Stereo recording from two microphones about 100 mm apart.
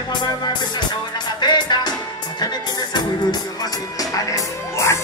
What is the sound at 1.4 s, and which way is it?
Music, 45° left (ahead or behind).